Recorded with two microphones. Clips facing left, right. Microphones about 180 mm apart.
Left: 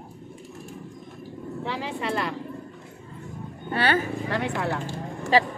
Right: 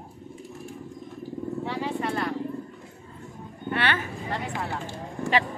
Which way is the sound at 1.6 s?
90° left.